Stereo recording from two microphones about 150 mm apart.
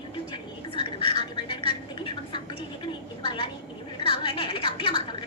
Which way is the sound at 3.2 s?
35° left (ahead or behind).